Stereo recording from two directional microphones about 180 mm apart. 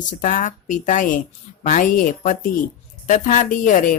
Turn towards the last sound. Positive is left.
turn(degrees=45)  # may be behind; listen again after turning